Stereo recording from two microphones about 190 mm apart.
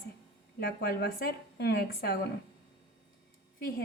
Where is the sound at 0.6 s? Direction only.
55° left (ahead or behind).